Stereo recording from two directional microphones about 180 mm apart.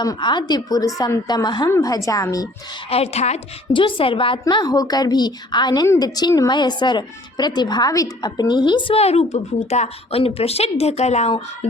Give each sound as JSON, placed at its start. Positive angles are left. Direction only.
{"t": 0.0, "sound": "a woman's voice", "side_deg": 25}
{"t": 2.9, "sound": "a woman's voice", "side_deg": 35}